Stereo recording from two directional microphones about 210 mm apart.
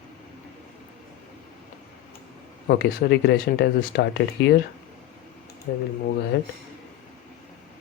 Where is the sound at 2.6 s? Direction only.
50° left (ahead or behind).